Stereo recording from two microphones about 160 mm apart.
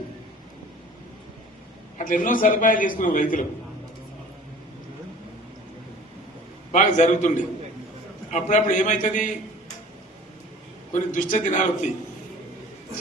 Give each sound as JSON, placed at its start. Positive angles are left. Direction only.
{"t": 2.0, "sound": "a man's voice", "side_deg": 55}
{"t": 6.7, "sound": "a man's voice", "side_deg": 50}
{"t": 10.9, "sound": "a man's voice", "side_deg": 55}